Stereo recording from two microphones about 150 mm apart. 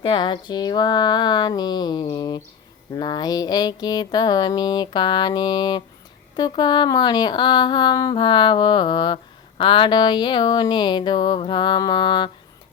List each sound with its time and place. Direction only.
0.0 s music: 30° left (ahead or behind)
6.3 s speech: 30° left (ahead or behind)